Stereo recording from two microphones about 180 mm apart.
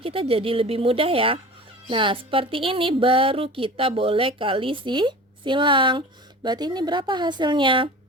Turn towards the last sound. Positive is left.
turn(degrees=-30)  # may be behind; listen again after turning